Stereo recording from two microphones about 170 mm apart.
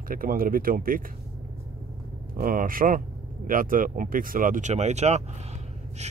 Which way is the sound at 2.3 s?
55° right (ahead or behind).